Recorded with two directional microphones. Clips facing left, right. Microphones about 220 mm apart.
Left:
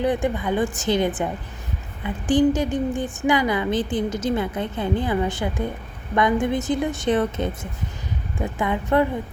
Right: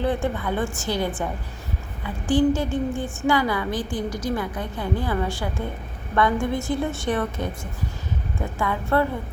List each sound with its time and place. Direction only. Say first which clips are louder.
0.0 s a woman's voice: left 2 dB; 15° left (ahead or behind)